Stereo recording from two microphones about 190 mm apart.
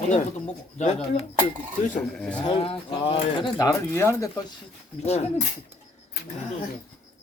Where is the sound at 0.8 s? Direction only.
35° left (ahead or behind).